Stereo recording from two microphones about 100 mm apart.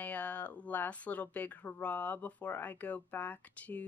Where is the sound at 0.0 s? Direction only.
15° left (ahead or behind).